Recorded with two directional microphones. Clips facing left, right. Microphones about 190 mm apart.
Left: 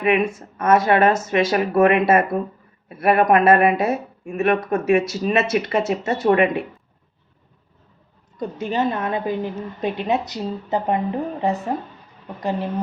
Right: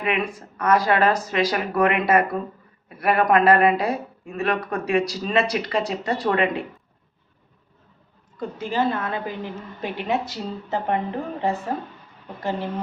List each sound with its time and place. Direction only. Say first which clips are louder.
0.0 s speech: left 6 dB; 25° left (ahead or behind)
8.4 s speech: left 2 dB; 20° left (ahead or behind)